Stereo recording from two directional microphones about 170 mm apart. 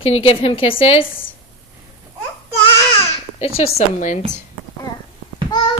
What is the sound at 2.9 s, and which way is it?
Babbling, 35° left (ahead or behind).